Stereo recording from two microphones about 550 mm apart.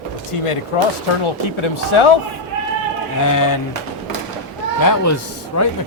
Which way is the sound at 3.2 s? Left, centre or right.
Left.